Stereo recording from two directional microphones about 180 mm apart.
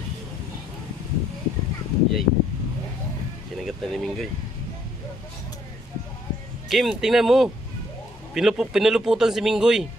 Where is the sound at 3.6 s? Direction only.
Centre (ahead or behind).